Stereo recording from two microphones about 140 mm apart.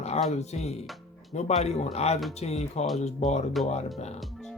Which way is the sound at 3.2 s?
Centre (ahead or behind).